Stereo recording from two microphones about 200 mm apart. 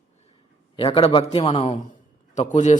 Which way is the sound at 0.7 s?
30° left (ahead or behind).